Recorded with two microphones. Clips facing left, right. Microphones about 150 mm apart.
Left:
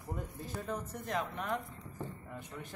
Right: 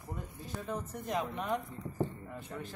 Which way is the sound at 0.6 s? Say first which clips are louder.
Right 2 dB; 5° right (ahead or behind).